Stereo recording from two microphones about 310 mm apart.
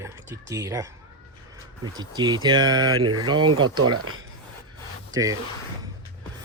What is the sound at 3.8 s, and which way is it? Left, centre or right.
Speech, right.